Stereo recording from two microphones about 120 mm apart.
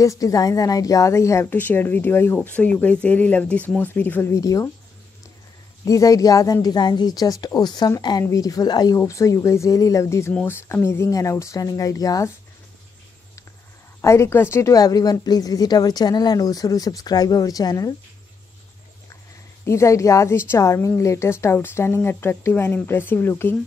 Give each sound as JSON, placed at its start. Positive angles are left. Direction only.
{"t": 0.0, "sound": "a woman's voice", "side_deg": 30}
{"t": 5.9, "sound": "a woman's voice", "side_deg": 30}
{"t": 14.0, "sound": "a woman's voice", "side_deg": 20}
{"t": 19.6, "sound": "a woman's voice", "side_deg": 25}